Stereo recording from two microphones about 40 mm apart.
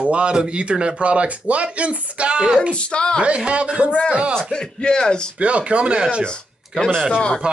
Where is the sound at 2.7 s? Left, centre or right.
Left.